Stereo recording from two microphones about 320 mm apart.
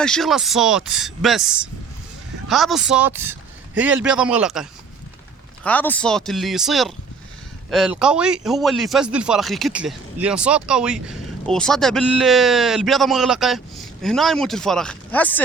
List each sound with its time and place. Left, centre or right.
0.0 s a man's voice: centre